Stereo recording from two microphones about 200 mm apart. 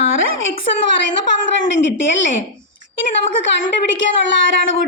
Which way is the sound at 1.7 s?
65° left (ahead or behind).